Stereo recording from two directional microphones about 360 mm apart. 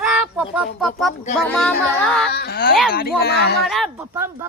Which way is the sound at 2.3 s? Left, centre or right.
Left.